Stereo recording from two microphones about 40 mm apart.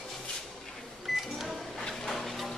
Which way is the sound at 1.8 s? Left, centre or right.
Centre.